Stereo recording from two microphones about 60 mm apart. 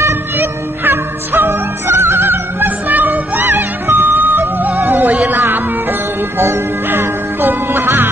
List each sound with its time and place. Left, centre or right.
0.4 s music: right